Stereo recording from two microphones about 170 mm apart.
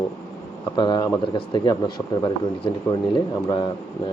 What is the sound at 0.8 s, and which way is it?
Speech, 25° left (ahead or behind).